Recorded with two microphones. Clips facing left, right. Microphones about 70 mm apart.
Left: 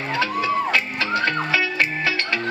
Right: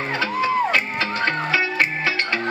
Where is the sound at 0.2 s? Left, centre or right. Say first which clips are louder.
Right 1 dB; right.